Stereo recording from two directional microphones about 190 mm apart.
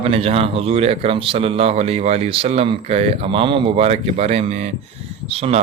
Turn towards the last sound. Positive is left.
turn(degrees=-30)  # may be behind; listen again after turning